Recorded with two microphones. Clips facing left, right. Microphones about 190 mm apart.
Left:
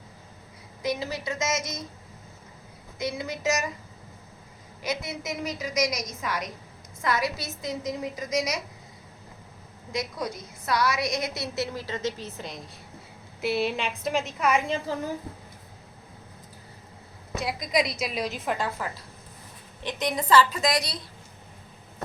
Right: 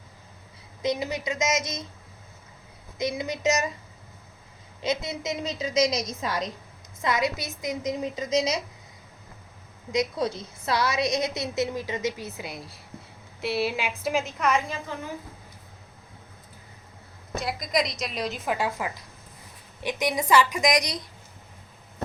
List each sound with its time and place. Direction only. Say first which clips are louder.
0.8 s a woman's voice: right 2 dB; 20° right (ahead or behind)
3.0 s a woman's voice: right 3 dB; 20° right (ahead or behind)
4.8 s a woman's voice: right 3 dB; 20° right (ahead or behind)
9.9 s a woman's voice: right 5 dB; 25° right (ahead or behind); by 14.6 s 5° left (ahead or behind)
14.7 s a child's voice: left 5 dB; 35° left (ahead or behind)
17.4 s a woman's voice: left 1 dB; centre (ahead or behind); by 21.0 s 15° right (ahead or behind)